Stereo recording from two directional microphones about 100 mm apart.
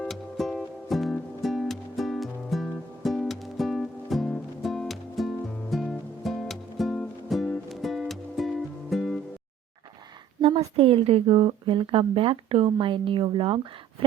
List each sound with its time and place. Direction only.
0.1 s music: centre (ahead or behind)
10.4 s a woman's voice: 65° right (ahead or behind)